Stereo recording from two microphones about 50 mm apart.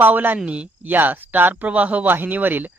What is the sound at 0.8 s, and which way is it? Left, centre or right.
Speech, right.